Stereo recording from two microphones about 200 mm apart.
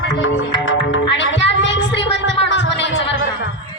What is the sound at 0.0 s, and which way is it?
Music, 70° left (ahead or behind).